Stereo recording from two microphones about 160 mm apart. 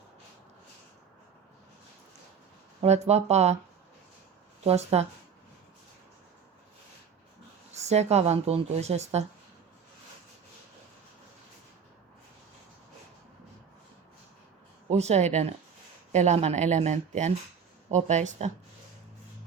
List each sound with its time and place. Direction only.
2.8 s speech: 40° right (ahead or behind)
4.6 s speech: 40° right (ahead or behind)
7.7 s speech: 45° right (ahead or behind)
14.8 s speech: 45° right (ahead or behind)